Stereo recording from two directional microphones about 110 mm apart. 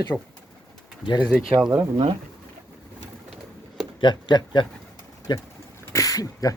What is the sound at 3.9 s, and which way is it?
A man's voice, 45° left (ahead or behind).